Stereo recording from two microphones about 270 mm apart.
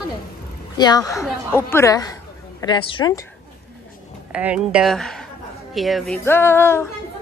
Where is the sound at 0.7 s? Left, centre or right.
Centre.